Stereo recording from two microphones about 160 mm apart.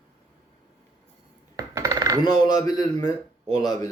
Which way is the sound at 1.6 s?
20° right (ahead or behind).